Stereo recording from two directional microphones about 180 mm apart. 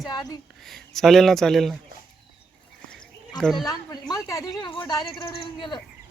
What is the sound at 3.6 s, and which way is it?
A woman's voice, 20° left (ahead or behind).